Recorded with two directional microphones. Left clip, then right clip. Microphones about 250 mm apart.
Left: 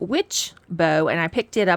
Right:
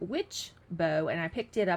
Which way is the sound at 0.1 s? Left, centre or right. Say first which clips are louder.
Left 11 dB; left.